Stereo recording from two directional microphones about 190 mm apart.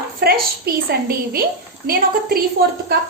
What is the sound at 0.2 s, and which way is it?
A woman's voice, 55° right (ahead or behind).